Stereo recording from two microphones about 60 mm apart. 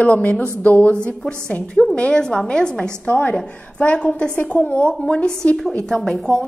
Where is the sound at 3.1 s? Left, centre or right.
Left.